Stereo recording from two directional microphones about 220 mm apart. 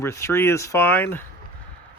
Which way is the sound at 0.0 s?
10° left (ahead or behind).